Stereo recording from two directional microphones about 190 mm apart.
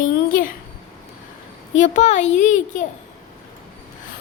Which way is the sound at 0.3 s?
45° left (ahead or behind).